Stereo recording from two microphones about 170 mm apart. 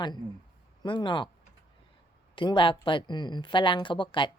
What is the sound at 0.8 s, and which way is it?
Speech, 25° left (ahead or behind).